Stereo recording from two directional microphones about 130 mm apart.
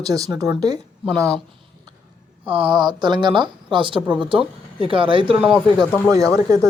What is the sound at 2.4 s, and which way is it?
Speech, 45° right (ahead or behind).